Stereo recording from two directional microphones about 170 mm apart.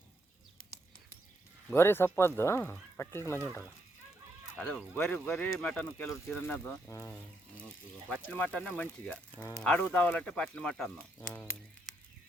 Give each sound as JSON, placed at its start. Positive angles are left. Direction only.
{"t": 1.7, "sound": "speech", "side_deg": 15}
{"t": 6.9, "sound": "speech", "side_deg": 15}